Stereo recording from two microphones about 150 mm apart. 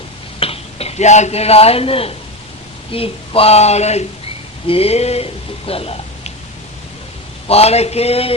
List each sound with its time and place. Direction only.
0.3 s speech: 40° left (ahead or behind)
7.4 s speech: 45° left (ahead or behind)